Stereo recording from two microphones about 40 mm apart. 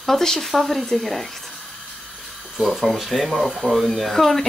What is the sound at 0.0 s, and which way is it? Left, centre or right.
Speech, centre.